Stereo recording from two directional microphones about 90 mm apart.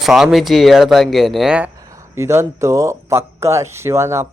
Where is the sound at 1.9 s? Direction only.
30° right (ahead or behind).